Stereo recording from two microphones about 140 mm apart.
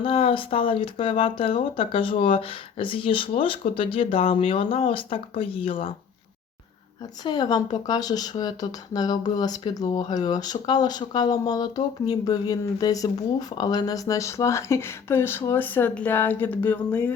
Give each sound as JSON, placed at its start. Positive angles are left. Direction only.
{"t": 0.0, "sound": "speech", "side_deg": 40}
{"t": 7.3, "sound": "speech", "side_deg": 30}